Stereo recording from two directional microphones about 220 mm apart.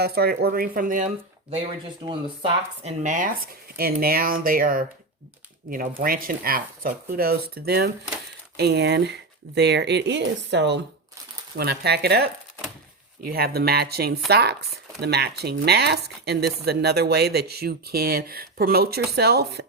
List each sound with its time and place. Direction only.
0.0 s speech: 45° right (ahead or behind)
2.0 s speech: 25° right (ahead or behind); by 19.6 s 45° right (ahead or behind)